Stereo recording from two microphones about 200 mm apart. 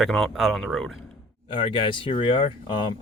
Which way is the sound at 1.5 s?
25° left (ahead or behind).